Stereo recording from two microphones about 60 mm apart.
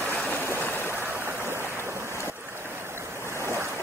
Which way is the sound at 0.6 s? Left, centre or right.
Left.